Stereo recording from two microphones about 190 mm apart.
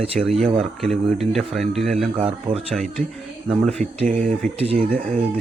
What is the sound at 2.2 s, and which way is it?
Speech, 30° right (ahead or behind).